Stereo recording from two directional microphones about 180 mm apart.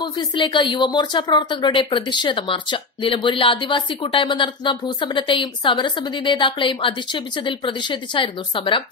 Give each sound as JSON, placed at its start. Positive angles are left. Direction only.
{"t": 0.0, "sound": "a woman's voice", "side_deg": 25}